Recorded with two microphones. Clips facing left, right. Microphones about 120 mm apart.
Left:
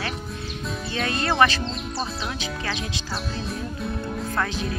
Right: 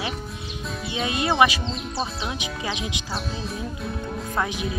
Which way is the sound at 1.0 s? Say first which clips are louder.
Right 2 dB; 15° right (ahead or behind).